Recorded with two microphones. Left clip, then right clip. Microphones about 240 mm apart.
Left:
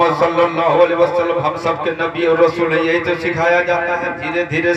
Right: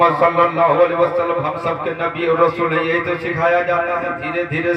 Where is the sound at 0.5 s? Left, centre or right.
Left.